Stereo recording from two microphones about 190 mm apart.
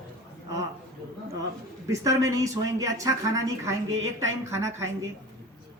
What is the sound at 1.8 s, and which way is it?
Speech, 15° right (ahead or behind).